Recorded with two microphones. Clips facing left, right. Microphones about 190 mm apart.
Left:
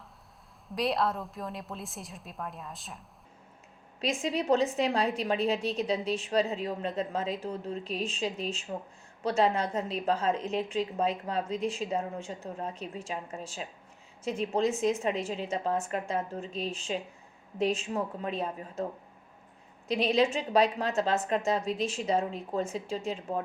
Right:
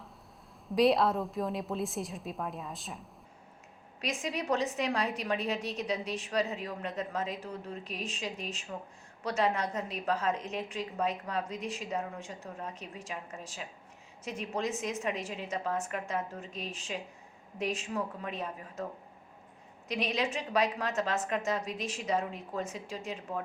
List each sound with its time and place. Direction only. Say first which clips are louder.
0.8 s a woman's voice: right 4 dB; centre (ahead or behind)
4.0 s a woman's voice: left 5 dB; 25° left (ahead or behind)
19.9 s a woman's voice: left 7 dB; 30° left (ahead or behind)